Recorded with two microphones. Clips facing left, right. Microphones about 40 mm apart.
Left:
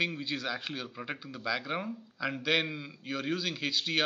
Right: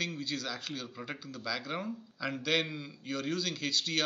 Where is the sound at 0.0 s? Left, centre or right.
Left.